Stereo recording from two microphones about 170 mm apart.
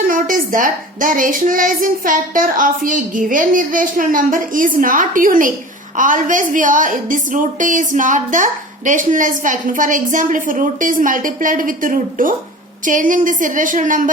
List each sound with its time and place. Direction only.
0.1 s a woman's voice: 55° right (ahead or behind)